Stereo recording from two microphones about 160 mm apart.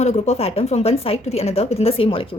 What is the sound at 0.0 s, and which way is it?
A woman's voice, 45° left (ahead or behind).